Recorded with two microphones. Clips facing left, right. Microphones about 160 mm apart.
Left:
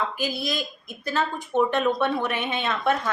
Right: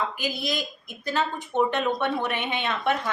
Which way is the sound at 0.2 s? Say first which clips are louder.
Left 1 dB; 20° right (ahead or behind).